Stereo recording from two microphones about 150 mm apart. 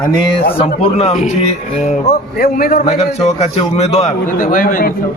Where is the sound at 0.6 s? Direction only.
45° left (ahead or behind).